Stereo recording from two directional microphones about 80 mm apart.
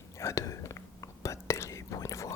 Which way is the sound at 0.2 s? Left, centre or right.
Left.